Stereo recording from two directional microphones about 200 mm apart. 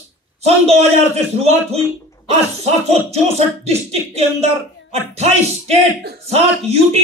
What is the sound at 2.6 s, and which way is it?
A man's voice, 30° right (ahead or behind).